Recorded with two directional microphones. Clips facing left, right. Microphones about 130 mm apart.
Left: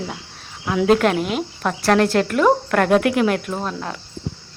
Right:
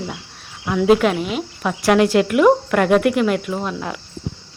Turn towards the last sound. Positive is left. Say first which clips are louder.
# right 2 dB
turn(degrees=0)  # may be behind; listen again after turning